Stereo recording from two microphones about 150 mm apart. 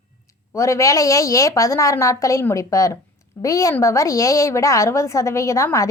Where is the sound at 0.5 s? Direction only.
20° left (ahead or behind).